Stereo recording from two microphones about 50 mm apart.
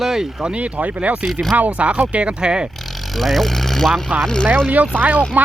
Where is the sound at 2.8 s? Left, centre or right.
Centre.